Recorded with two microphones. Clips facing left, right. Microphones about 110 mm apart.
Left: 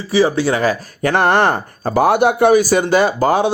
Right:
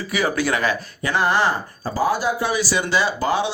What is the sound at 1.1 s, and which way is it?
Speech, 60° left (ahead or behind).